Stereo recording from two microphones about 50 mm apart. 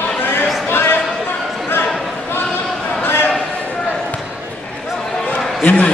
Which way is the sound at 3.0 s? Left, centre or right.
Left.